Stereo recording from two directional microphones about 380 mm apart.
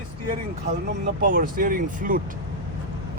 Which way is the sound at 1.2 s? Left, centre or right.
Right.